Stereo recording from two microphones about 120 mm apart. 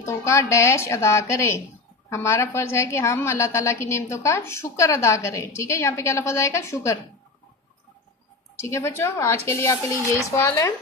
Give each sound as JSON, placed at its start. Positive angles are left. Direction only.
{"t": 0.0, "sound": "a woman's voice", "side_deg": 25}
{"t": 8.5, "sound": "a woman's voice", "side_deg": 25}